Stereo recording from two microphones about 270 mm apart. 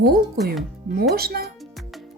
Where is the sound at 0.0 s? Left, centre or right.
Right.